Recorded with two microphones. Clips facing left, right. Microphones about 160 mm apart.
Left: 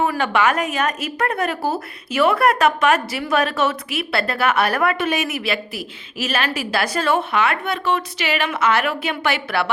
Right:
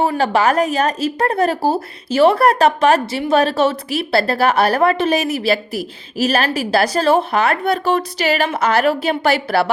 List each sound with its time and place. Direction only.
0.0 s a woman's voice: 30° right (ahead or behind)